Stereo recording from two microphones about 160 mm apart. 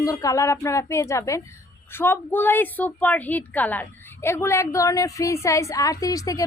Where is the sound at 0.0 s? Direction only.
20° left (ahead or behind).